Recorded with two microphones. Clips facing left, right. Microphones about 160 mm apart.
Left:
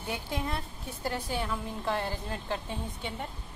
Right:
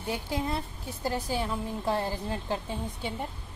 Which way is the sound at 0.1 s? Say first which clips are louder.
Right 3 dB; 30° right (ahead or behind).